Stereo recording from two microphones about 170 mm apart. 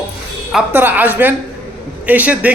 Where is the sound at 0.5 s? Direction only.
10° right (ahead or behind).